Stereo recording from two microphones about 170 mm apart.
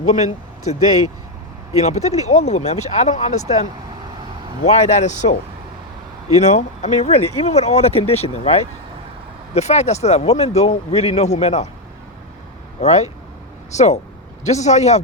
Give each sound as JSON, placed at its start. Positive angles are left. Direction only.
{"t": 0.0, "sound": "speech", "side_deg": 45}
{"t": 12.8, "sound": "speech", "side_deg": 40}